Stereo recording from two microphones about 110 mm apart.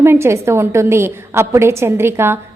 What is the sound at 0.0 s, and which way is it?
A woman's voice, 25° right (ahead or behind).